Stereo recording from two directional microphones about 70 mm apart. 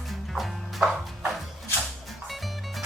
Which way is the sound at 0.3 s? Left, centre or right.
Centre.